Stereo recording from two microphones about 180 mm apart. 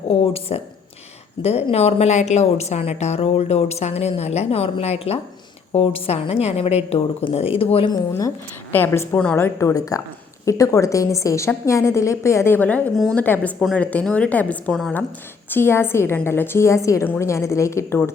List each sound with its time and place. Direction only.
0.1 s a woman's voice: 30° left (ahead or behind)
8.7 s a woman's voice: 10° left (ahead or behind)